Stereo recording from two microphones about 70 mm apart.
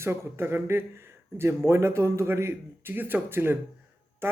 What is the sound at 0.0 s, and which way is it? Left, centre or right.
A man's voice, right.